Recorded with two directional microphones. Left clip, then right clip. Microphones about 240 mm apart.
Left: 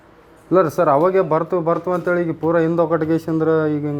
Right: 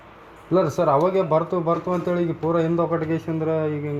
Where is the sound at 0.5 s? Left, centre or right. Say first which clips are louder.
Left 4 dB; left.